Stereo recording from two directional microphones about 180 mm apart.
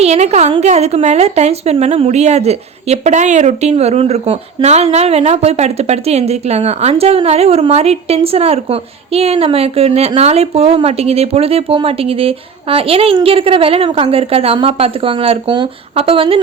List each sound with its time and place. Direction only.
0.0 s a woman's voice: 35° right (ahead or behind)